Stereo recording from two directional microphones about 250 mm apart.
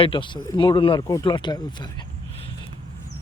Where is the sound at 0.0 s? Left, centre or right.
Centre.